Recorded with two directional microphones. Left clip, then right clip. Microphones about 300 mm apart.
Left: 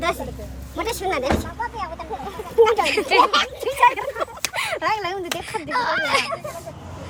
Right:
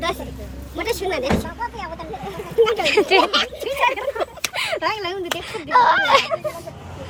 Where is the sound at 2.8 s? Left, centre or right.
Centre.